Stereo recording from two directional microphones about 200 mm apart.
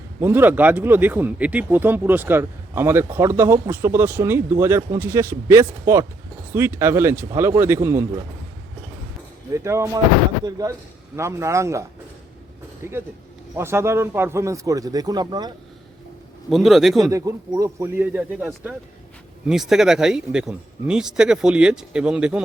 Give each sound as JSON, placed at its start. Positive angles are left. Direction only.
{"t": 0.2, "sound": "speech", "side_deg": -10}
{"t": 9.5, "sound": "speech", "side_deg": -15}
{"t": 16.5, "sound": "speech", "side_deg": 0}
{"t": 17.1, "sound": "speech", "side_deg": -15}